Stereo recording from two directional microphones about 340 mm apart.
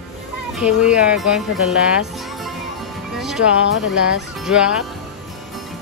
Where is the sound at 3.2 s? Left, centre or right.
Centre.